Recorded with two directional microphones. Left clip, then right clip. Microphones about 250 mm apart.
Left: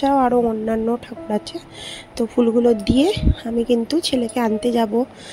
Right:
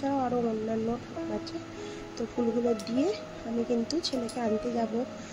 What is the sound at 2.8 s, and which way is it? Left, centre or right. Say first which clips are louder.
A woman's voice: left 12 dB; left.